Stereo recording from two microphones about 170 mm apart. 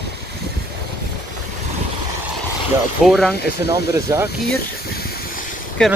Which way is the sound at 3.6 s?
15° right (ahead or behind).